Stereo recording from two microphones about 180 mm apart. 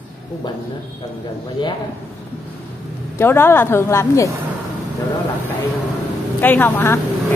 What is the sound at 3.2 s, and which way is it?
Speech, 15° left (ahead or behind).